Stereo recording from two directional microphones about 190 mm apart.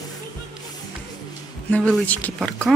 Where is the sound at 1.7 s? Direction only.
Centre (ahead or behind).